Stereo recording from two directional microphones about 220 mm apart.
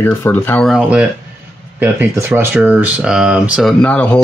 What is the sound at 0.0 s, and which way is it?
Speech, 10° left (ahead or behind).